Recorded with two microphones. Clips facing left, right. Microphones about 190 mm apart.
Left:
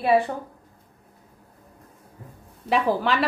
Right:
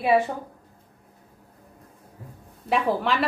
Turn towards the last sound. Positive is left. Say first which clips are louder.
# left 1 dB
turn(degrees=0)  # may be behind; listen again after turning